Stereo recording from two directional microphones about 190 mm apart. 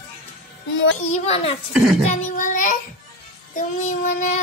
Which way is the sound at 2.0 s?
45° left (ahead or behind).